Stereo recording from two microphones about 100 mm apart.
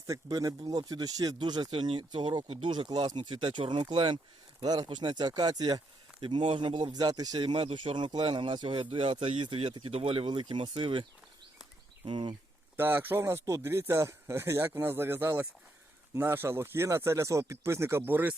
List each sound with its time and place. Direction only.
0.1 s speech: 35° right (ahead or behind)
6.1 s speech: 55° right (ahead or behind); by 7.4 s 40° right (ahead or behind)
7.6 s speech: 60° right (ahead or behind)
9.9 s speech: 70° right (ahead or behind)
12.0 s speech: 55° right (ahead or behind)
12.7 s speech: 20° right (ahead or behind)